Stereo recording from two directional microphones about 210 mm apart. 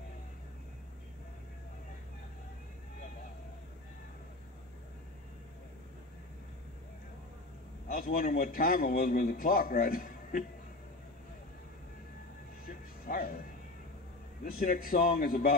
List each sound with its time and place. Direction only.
7.9 s a man's voice: 45° left (ahead or behind)
12.6 s music: 45° left (ahead or behind)
14.6 s a man's voice: 45° left (ahead or behind)